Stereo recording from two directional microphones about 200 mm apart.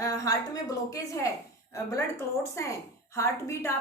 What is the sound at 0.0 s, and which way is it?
A woman's voice, 15° left (ahead or behind).